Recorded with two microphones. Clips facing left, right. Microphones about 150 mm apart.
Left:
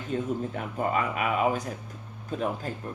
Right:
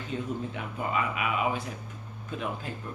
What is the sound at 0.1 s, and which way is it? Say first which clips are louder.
Speech: left 4 dB; 45° left (ahead or behind).